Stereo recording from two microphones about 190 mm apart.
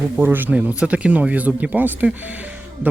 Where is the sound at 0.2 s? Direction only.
10° right (ahead or behind).